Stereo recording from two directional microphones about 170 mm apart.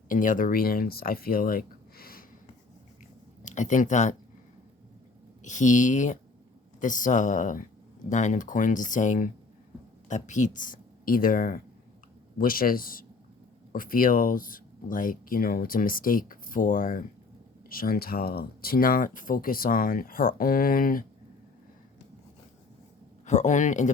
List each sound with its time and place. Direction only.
0.1 s speech: 50° left (ahead or behind)
3.4 s speech: 45° left (ahead or behind)
5.4 s speech: 45° left (ahead or behind)
23.2 s speech: 45° left (ahead or behind)